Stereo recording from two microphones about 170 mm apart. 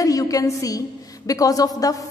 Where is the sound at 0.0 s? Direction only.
20° left (ahead or behind).